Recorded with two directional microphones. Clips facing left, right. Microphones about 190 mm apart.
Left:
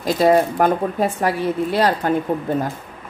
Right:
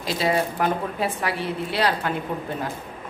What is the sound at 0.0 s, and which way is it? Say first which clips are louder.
Speech: left 8 dB; 50° left (ahead or behind).